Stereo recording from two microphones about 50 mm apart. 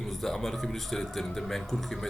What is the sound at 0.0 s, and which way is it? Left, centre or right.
A man's voice, centre.